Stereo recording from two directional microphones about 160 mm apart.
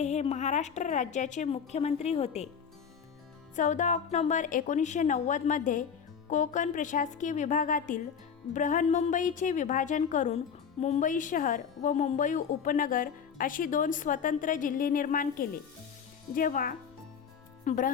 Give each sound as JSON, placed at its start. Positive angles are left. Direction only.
{"t": 0.0, "sound": "a woman's voice", "side_deg": 45}
{"t": 3.5, "sound": "a woman's voice", "side_deg": 50}